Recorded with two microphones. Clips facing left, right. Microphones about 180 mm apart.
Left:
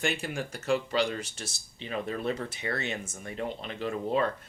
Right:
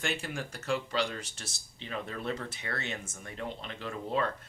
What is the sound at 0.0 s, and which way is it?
Speech, 15° left (ahead or behind).